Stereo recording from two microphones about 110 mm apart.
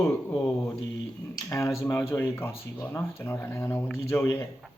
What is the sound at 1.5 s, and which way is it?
Speech, 25° left (ahead or behind).